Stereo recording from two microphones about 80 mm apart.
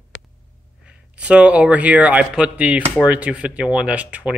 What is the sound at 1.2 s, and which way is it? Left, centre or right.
Speech, centre.